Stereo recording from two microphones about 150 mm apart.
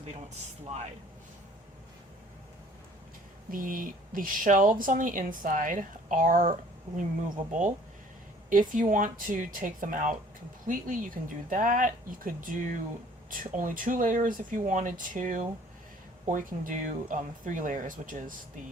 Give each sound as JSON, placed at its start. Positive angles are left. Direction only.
{"t": 3.5, "sound": "speech", "side_deg": -65}
{"t": 8.4, "sound": "speech", "side_deg": -65}